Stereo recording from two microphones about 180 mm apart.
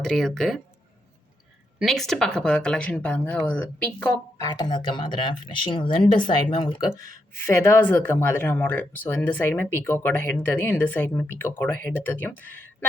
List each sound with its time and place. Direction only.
0.0 s speech: centre (ahead or behind)
1.8 s speech: centre (ahead or behind)
4.4 s speech: 20° left (ahead or behind)
7.5 s speech: 15° left (ahead or behind)